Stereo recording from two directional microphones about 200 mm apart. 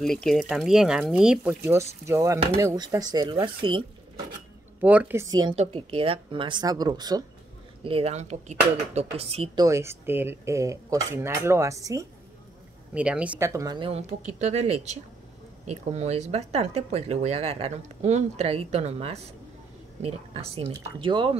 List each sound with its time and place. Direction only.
0.0 s a woman's voice: centre (ahead or behind); by 3.8 s 25° right (ahead or behind)
4.8 s a woman's voice: 10° right (ahead or behind); by 9.7 s 30° right (ahead or behind)
9.7 s a woman's voice: 15° right (ahead or behind)